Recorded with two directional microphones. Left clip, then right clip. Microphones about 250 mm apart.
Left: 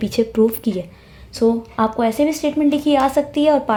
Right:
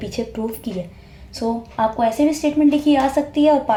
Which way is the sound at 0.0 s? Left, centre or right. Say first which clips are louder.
Left 9 dB; left.